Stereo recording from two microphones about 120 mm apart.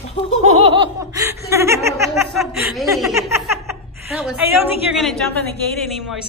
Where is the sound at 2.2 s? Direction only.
Centre (ahead or behind).